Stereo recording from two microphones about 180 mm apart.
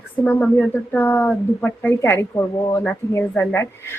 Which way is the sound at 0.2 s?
10° left (ahead or behind).